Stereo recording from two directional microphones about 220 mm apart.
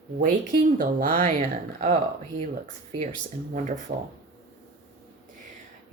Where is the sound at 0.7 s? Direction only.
40° right (ahead or behind).